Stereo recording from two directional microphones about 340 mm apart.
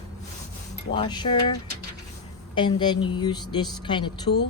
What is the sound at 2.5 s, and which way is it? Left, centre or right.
Speech, centre.